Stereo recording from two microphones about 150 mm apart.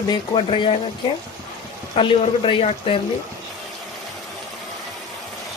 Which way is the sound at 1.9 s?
35° left (ahead or behind).